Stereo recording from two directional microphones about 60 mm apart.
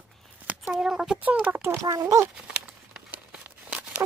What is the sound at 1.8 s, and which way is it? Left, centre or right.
Speech, right.